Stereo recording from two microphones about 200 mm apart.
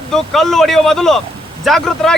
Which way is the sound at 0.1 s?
Centre (ahead or behind).